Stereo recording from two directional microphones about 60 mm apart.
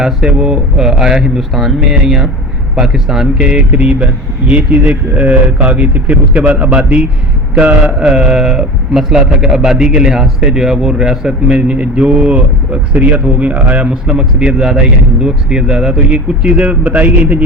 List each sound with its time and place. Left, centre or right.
0.0 s a man's voice: centre